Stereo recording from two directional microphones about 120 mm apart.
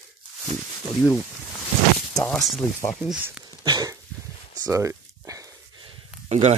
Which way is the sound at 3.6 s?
35° right (ahead or behind).